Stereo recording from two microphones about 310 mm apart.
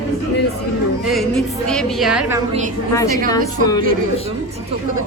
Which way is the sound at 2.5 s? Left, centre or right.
Right.